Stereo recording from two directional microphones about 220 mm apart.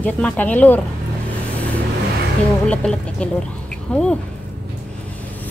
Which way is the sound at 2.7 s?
5° left (ahead or behind).